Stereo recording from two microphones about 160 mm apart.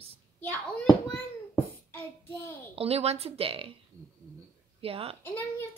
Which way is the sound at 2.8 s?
40° right (ahead or behind).